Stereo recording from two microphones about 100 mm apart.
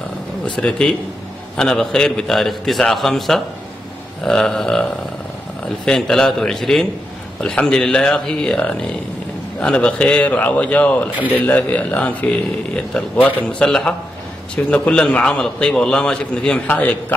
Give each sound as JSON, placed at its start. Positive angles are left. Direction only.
{"t": 0.6, "sound": "a man's voice", "side_deg": 10}
{"t": 5.9, "sound": "a man's voice", "side_deg": 5}